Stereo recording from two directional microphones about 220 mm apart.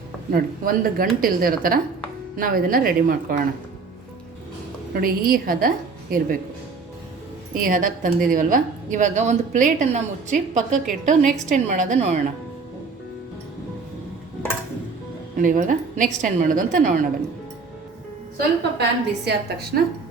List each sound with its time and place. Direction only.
0.6 s a woman's voice: 40° right (ahead or behind)
4.9 s a woman's voice: 40° right (ahead or behind)
7.5 s a woman's voice: 40° right (ahead or behind)
15.4 s a woman's voice: 35° right (ahead or behind)
18.3 s a woman's voice: 50° right (ahead or behind)